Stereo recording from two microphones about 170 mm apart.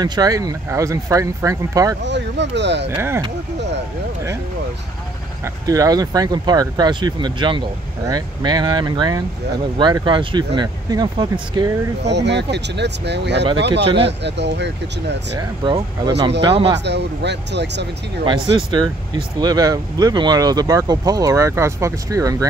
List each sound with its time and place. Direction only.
0.0 s speech: 25° right (ahead or behind)
2.0 s speech: 90° right
5.4 s speech: 20° right (ahead or behind)
12.0 s speech: 90° right
15.3 s speech: 25° right (ahead or behind)
16.8 s speech: 90° right
18.2 s speech: 30° right (ahead or behind)